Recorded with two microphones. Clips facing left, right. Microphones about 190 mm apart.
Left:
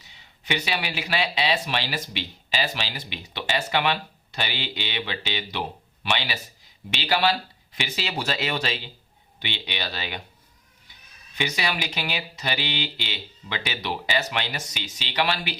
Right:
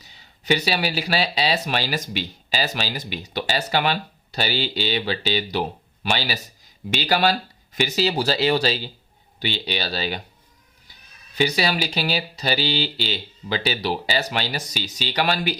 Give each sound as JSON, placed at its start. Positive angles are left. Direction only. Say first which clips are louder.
{"t": 0.0, "sound": "speech", "louder": "right 3 dB", "side_deg": -40}
{"t": 11.3, "sound": "speech", "louder": "right 6 dB", "side_deg": -35}